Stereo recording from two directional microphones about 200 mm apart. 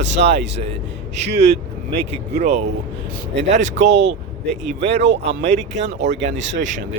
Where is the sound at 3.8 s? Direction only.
35° right (ahead or behind).